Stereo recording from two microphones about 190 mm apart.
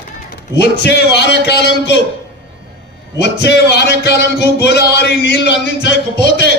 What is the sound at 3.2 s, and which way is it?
Music, 60° left (ahead or behind).